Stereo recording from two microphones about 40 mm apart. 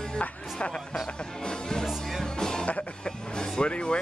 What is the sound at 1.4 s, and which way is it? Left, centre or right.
Music, centre.